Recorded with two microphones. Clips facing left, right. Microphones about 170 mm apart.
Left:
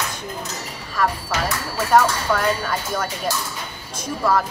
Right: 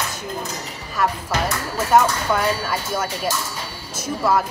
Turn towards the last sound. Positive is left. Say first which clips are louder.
# right 1 dB
turn(degrees=-5)  # may be behind; listen again after turning